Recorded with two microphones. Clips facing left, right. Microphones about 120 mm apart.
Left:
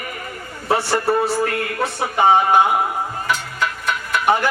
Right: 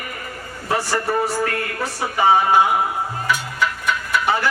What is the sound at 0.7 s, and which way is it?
Speech, 25° left (ahead or behind).